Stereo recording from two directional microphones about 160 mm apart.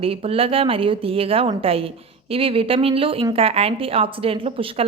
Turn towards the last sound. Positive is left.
turn(degrees=-35)  # may be behind; listen again after turning